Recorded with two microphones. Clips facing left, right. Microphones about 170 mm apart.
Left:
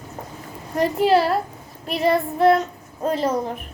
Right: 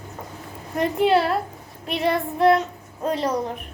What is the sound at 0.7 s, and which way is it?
Speech, centre (ahead or behind).